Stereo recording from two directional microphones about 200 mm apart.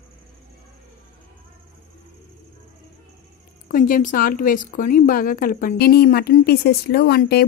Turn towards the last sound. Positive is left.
turn(degrees=50)  # may be behind; listen again after turning